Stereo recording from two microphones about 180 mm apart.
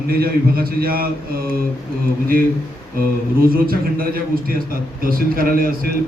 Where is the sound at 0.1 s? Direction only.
55° right (ahead or behind).